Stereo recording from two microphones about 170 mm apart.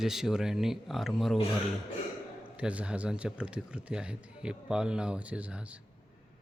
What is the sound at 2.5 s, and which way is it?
A man's voice, 5° right (ahead or behind).